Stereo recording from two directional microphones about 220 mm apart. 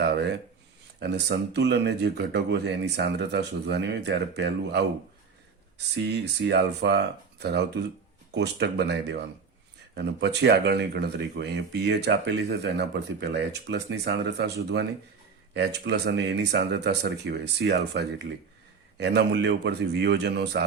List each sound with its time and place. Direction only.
0.0 s a sound: 50° right (ahead or behind)
0.9 s speech: 50° right (ahead or behind)
6.4 s speech: 50° right (ahead or behind)